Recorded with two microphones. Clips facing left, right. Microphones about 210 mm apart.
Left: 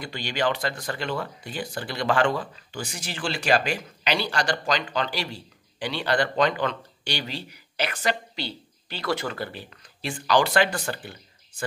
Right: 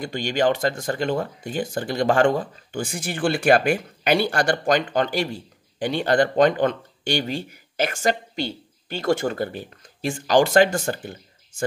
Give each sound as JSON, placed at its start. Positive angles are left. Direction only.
{"t": 0.0, "sound": "speech", "side_deg": -45}